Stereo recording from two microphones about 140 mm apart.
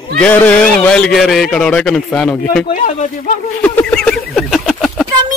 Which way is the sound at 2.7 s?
60° left (ahead or behind).